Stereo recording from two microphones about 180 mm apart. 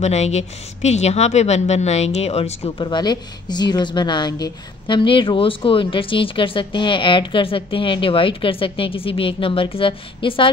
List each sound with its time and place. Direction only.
0.0 s speech: 40° left (ahead or behind)